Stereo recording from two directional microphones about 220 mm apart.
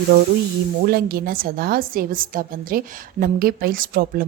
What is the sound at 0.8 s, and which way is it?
A woman's voice, 45° right (ahead or behind).